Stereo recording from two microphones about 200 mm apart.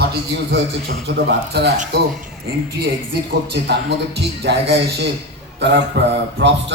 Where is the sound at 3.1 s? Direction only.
55° right (ahead or behind).